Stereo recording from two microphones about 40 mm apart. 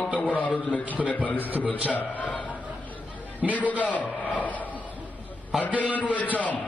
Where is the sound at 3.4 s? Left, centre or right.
Centre.